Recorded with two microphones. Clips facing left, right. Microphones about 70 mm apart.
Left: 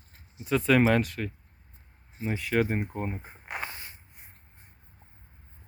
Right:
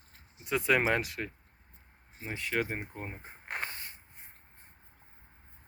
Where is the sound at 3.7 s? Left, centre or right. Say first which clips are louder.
Left 2 dB; left.